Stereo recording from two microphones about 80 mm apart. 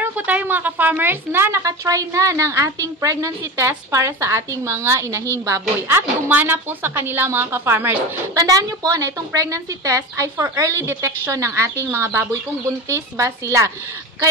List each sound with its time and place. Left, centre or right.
0.0 s a woman's voice: right
1.6 s a woman's voice: right
8.4 s a woman's voice: right